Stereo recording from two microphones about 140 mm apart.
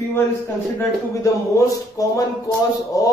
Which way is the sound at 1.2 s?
25° left (ahead or behind).